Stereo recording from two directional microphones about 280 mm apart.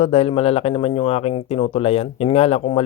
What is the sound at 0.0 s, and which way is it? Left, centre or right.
A man's voice, left.